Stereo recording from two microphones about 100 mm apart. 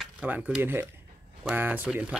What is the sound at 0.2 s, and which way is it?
Speech, 15° right (ahead or behind).